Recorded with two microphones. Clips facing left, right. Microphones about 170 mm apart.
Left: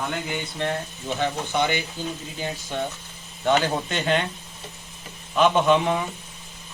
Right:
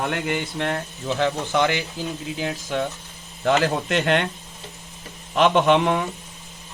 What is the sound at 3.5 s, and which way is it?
Speech, 80° right.